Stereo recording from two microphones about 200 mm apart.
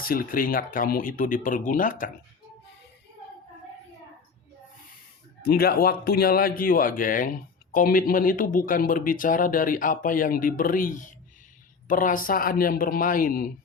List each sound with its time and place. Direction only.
0.0 s a man's voice: 45° left (ahead or behind)
5.4 s a man's voice: 50° left (ahead or behind)